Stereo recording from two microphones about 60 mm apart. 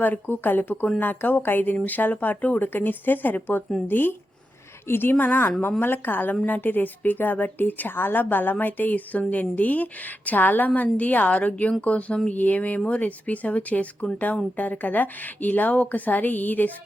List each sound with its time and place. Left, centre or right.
0.0 s speech: left